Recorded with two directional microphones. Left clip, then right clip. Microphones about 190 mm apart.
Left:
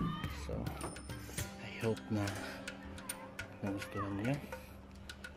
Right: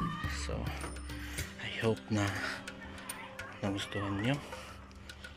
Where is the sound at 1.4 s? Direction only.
5° left (ahead or behind).